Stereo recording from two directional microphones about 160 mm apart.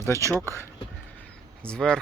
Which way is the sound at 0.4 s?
15° left (ahead or behind).